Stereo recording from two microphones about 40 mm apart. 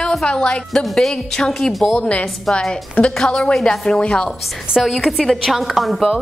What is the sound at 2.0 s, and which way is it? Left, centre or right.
A woman's voice, left.